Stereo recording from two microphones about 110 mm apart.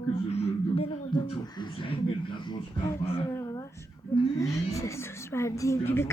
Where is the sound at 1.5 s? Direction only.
50° left (ahead or behind).